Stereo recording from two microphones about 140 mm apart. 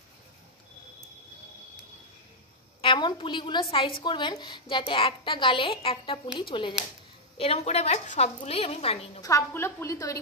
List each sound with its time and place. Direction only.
2.8 s a woman's voice: 35° left (ahead or behind)
7.3 s a woman's voice: 45° left (ahead or behind)
9.2 s a woman's voice: 20° left (ahead or behind)